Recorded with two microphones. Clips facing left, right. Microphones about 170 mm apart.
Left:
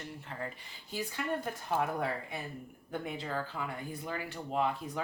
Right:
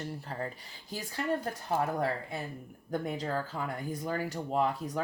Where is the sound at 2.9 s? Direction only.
40° right (ahead or behind).